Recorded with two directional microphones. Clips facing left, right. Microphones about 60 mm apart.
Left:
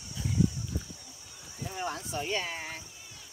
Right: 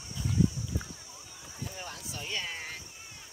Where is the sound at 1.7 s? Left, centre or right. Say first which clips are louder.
Left 8 dB; left.